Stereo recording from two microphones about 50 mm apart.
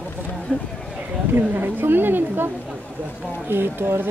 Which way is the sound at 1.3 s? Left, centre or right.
Right.